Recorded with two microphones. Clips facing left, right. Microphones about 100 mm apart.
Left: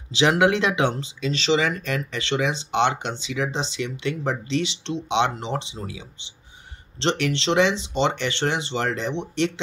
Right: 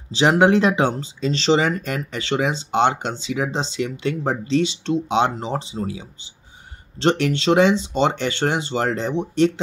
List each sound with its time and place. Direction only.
0.1 s speech: 35° right (ahead or behind)
7.0 s speech: 45° right (ahead or behind)